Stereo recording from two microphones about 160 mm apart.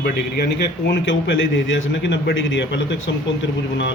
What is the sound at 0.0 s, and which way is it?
Speech, 90° left.